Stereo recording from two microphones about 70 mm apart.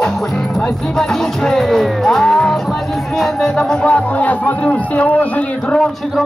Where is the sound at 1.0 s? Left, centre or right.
Centre.